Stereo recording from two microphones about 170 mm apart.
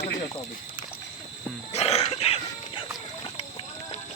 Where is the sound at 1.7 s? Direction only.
40° left (ahead or behind).